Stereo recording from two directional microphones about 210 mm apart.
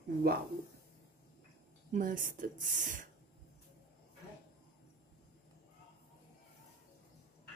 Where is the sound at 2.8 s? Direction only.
40° right (ahead or behind).